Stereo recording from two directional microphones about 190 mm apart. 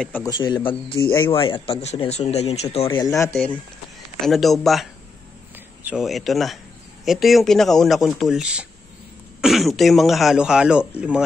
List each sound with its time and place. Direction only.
0.0 s speech: 10° left (ahead or behind)
0.3 s speech: 25° left (ahead or behind)
0.8 s speech: 55° left (ahead or behind)
1.2 s speech: 30° left (ahead or behind)
4.2 s a man's voice: centre (ahead or behind)
5.9 s a man's voice: centre (ahead or behind)